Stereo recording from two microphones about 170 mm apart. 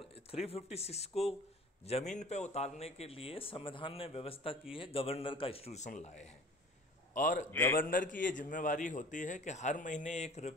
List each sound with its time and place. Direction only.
0.0 s a man's voice: 35° left (ahead or behind)
7.5 s a man's voice: 10° left (ahead or behind)
7.8 s a man's voice: 50° left (ahead or behind)